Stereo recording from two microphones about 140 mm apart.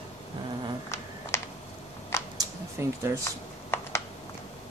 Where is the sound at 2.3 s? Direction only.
20° right (ahead or behind).